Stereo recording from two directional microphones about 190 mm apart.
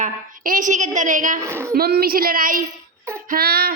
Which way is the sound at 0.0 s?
45° right (ahead or behind).